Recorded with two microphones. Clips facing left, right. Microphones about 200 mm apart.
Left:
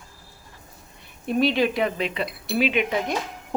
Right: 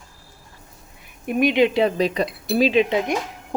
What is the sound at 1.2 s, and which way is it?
Speech, 15° right (ahead or behind).